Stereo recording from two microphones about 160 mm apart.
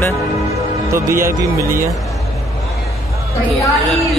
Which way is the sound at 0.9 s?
15° right (ahead or behind).